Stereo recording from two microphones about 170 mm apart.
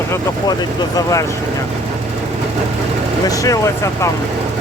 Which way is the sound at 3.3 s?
20° left (ahead or behind).